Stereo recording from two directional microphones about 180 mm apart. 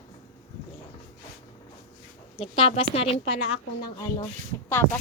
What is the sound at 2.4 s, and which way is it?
A woman's voice, 30° left (ahead or behind).